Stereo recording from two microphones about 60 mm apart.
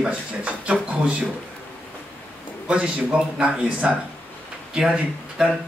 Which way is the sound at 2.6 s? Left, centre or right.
Centre.